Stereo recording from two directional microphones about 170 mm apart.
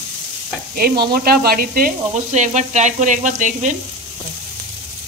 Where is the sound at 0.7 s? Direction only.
65° right (ahead or behind); by 3.7 s 50° right (ahead or behind).